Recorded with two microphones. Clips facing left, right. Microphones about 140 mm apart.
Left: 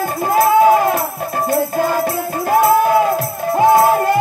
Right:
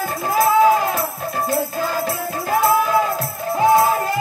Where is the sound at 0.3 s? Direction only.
55° left (ahead or behind).